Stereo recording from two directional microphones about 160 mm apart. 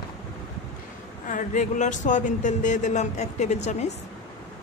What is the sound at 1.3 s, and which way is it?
Speech, 50° left (ahead or behind).